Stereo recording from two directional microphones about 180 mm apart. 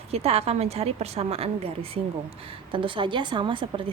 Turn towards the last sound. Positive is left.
turn(degrees=-25)  # may be behind; listen again after turning